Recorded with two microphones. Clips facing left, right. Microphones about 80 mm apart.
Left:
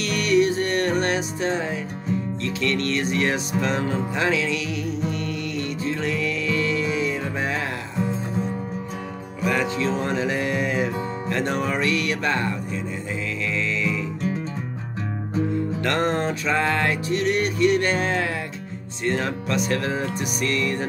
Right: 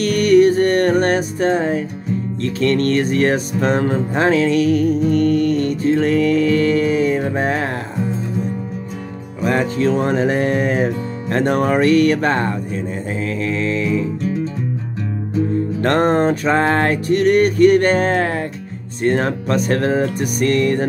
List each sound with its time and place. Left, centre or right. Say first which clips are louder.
0.0 s music: right 8 dB; right
9.4 s music: right 6 dB; right
15.8 s music: right 9 dB; right